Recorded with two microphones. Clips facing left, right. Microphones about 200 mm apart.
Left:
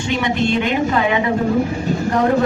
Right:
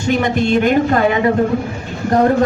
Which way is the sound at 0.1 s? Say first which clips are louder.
Right 4 dB; 45° right (ahead or behind).